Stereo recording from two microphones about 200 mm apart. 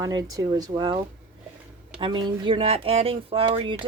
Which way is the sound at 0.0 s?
20° right (ahead or behind).